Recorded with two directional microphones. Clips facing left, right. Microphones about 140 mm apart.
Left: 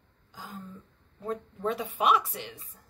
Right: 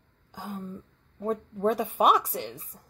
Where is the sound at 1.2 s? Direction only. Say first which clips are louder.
Right 5 dB; 45° right (ahead or behind).